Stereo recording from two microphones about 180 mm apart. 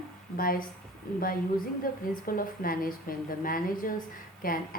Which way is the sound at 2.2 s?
55° left (ahead or behind).